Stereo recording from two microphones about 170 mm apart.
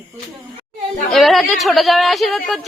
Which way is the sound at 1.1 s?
Centre (ahead or behind).